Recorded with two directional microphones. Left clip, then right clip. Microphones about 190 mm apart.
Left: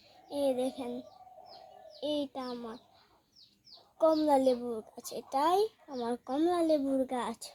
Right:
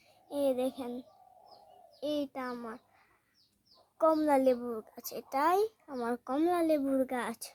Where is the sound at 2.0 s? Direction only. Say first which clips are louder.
Left 1 dB; 30° right (ahead or behind).